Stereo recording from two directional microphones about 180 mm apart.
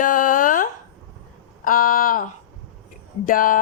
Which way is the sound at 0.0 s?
50° left (ahead or behind).